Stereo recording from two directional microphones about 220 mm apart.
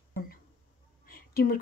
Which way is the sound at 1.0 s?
40° left (ahead or behind).